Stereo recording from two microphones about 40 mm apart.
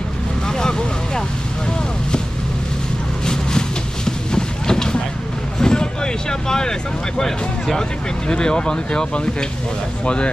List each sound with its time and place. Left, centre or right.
0.5 s vehicle: centre
3.3 s vehicle: centre
7.2 s speech: centre
8.3 s speech: left